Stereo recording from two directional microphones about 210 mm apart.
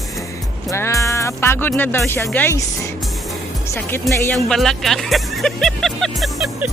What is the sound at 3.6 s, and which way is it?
Speech, 10° left (ahead or behind).